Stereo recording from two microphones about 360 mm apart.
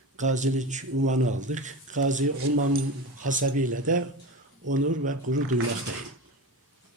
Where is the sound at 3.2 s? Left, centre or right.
Right.